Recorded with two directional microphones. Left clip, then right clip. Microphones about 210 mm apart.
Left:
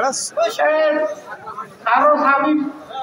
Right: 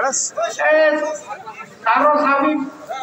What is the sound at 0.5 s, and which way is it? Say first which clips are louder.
A man's voice: right 3 dB; 50° right (ahead or behind).